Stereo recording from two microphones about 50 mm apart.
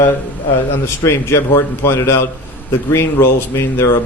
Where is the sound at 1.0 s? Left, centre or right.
Left.